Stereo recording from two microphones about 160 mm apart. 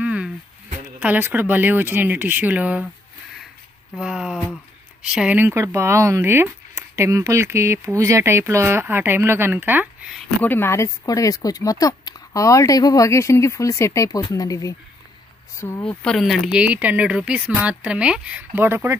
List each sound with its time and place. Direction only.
0.0 s a sound: 5° right (ahead or behind)
1.0 s speech: 10° right (ahead or behind)
4.0 s speech: 5° right (ahead or behind)
10.4 s speech: 15° left (ahead or behind)
15.8 s speech: 5° left (ahead or behind); by 18.9 s 15° right (ahead or behind)